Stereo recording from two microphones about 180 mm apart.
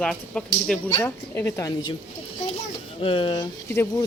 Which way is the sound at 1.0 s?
15° left (ahead or behind).